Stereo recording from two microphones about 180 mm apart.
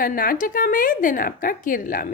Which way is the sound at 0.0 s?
50° left (ahead or behind).